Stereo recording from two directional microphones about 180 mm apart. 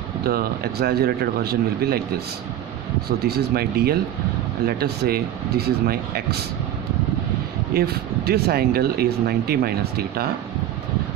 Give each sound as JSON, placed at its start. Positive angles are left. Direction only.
{"t": 0.2, "sound": "speech", "side_deg": -60}
{"t": 7.7, "sound": "speech", "side_deg": -60}